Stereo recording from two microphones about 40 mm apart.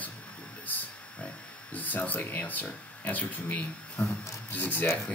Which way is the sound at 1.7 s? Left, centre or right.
Left.